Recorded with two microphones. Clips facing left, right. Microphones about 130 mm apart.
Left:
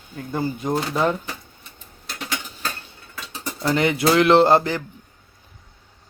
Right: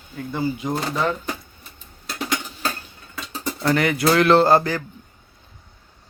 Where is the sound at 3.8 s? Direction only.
25° left (ahead or behind).